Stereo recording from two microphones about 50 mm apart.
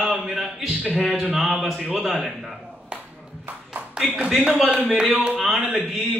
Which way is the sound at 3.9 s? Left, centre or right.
Right.